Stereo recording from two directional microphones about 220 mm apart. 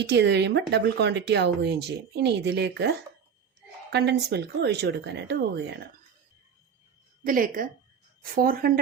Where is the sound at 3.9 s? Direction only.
50° right (ahead or behind).